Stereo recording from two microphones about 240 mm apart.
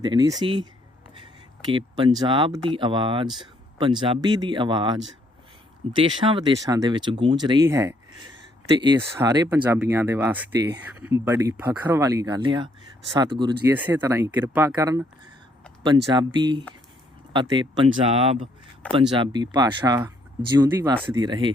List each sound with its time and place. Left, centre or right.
0.0 s speech: centre
3.2 s speech: centre
3.8 s speech: right
16.1 s speech: centre